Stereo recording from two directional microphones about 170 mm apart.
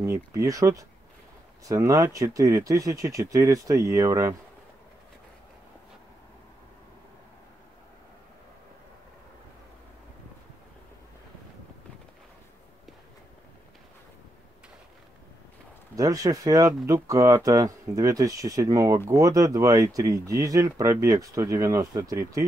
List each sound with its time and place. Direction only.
0.0 s speech: 20° right (ahead or behind)
16.0 s speech: 20° right (ahead or behind)